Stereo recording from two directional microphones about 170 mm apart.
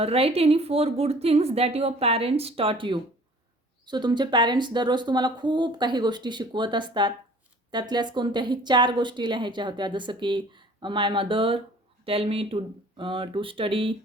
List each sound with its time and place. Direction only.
0.0 s a woman's voice: 35° right (ahead or behind)